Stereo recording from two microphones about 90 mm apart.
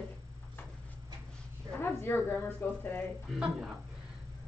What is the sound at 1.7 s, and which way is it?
Speech, 25° left (ahead or behind).